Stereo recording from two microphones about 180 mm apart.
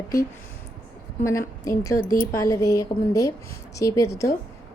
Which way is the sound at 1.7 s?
20° left (ahead or behind).